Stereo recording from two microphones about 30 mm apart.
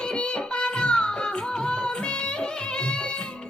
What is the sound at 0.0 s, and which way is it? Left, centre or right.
Music, left.